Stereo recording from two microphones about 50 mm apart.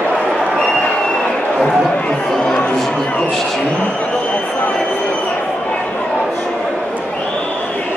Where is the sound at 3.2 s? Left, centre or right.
Centre.